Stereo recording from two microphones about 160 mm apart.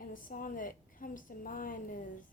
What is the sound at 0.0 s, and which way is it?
A woman's voice, 60° left (ahead or behind).